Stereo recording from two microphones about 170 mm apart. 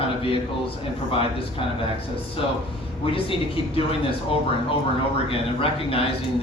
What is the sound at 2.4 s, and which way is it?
Speech, 30° left (ahead or behind).